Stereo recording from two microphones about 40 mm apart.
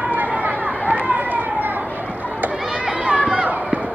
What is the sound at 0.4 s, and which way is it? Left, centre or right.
Chatter, right.